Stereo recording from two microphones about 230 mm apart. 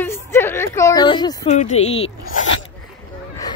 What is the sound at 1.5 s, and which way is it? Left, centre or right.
Speech, left.